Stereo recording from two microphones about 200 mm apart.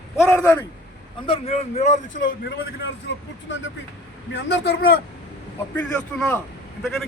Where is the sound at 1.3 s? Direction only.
35° left (ahead or behind).